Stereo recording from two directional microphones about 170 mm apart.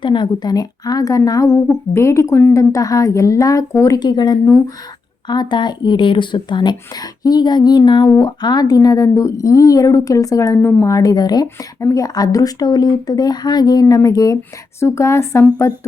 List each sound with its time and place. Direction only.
0.0 s a woman's voice: 25° left (ahead or behind)